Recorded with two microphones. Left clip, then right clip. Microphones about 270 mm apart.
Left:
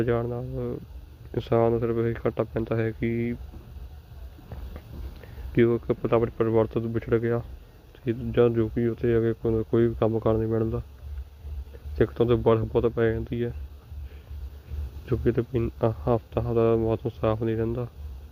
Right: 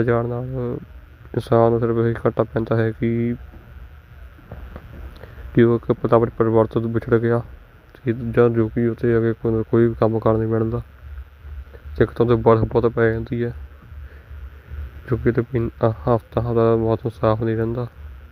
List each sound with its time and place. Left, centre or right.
0.0 s speech: right
5.6 s speech: right
6.7 s speech: right
6.9 s speech: right
11.9 s speech: centre
15.0 s speech: centre